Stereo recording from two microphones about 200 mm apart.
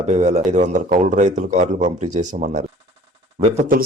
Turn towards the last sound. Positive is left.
turn(degrees=-30)  # may be behind; listen again after turning